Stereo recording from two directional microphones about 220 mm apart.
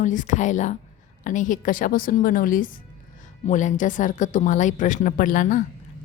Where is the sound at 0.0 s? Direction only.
35° left (ahead or behind).